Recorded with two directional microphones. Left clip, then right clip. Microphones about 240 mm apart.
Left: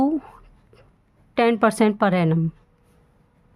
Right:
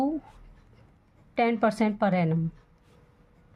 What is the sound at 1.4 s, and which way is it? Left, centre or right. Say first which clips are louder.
A woman's voice: left 6 dB; left.